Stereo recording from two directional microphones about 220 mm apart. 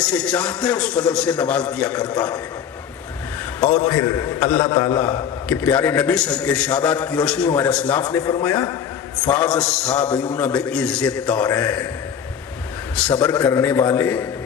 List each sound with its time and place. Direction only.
0.0 s a man's voice: 5° left (ahead or behind)
3.8 s a man's voice: 10° left (ahead or behind)
8.2 s a man's voice: 15° left (ahead or behind)
8.4 s a man's voice: 5° left (ahead or behind)
13.1 s a man's voice: 5° left (ahead or behind)